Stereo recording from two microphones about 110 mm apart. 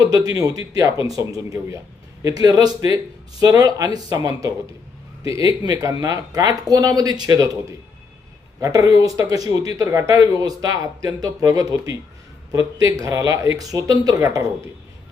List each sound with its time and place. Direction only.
0.3 s speech: 35° right (ahead or behind)